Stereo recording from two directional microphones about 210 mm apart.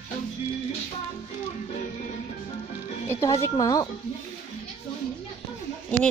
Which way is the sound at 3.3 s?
20° left (ahead or behind).